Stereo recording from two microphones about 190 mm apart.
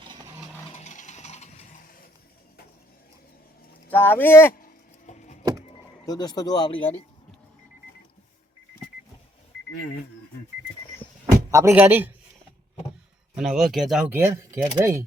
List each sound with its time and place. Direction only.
0.0 s vehicle: 20° right (ahead or behind)
0.7 s vehicle: 35° left (ahead or behind)
3.8 s speech: 10° left (ahead or behind)
4.5 s a sound: 45° left (ahead or behind)
6.1 s speech: 20° left (ahead or behind)
11.5 s speech: 15° right (ahead or behind)
13.3 s speech: centre (ahead or behind)